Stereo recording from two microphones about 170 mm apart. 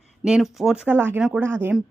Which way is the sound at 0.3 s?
5° right (ahead or behind).